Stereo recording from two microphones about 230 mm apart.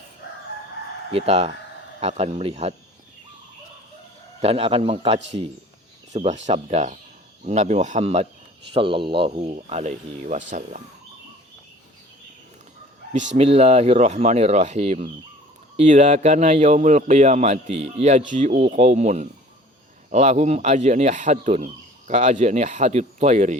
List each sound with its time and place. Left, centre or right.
1.1 s speech: right
4.4 s speech: right
13.1 s a man's voice: right